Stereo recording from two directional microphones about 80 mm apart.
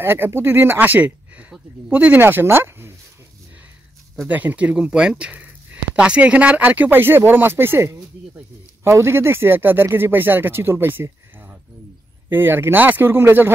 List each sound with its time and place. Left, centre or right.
0.0 s speech: right
4.3 s speech: right